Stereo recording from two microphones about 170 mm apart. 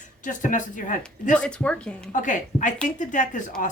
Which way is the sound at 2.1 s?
50° left (ahead or behind).